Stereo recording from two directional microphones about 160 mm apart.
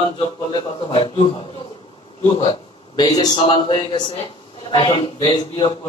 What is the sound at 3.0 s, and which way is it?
A man's voice, 30° left (ahead or behind).